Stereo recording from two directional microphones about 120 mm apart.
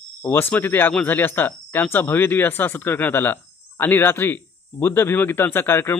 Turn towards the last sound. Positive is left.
turn(degrees=20)  # may be behind; listen again after turning